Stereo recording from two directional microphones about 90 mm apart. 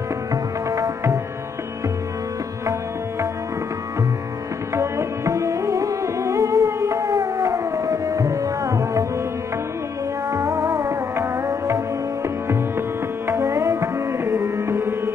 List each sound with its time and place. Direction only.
0.3 s music: 35° right (ahead or behind)
4.7 s music: 35° right (ahead or behind)
10.3 s music: 35° right (ahead or behind)
13.3 s music: 35° right (ahead or behind)